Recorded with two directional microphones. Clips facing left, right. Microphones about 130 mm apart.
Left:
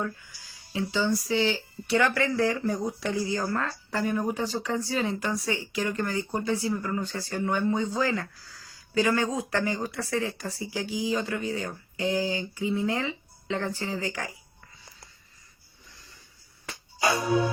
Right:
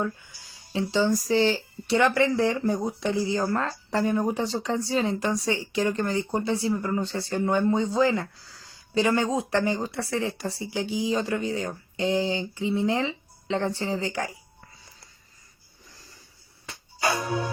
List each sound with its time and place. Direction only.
0.0 s speech: 25° right (ahead or behind)
2.0 s speech: 25° right (ahead or behind)